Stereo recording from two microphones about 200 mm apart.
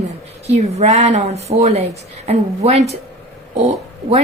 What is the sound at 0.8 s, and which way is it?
Speech, 35° right (ahead or behind).